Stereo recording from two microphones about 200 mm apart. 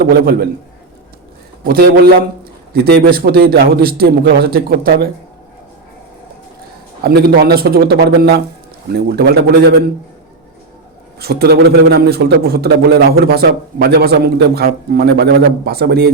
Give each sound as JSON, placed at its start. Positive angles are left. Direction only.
{"t": 0.0, "sound": "a man's voice", "side_deg": -50}
{"t": 1.6, "sound": "a man's voice", "side_deg": -50}
{"t": 7.0, "sound": "a man's voice", "side_deg": -55}
{"t": 11.2, "sound": "a man's voice", "side_deg": -55}